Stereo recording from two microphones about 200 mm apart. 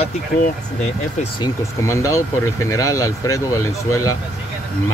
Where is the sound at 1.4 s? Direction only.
15° left (ahead or behind).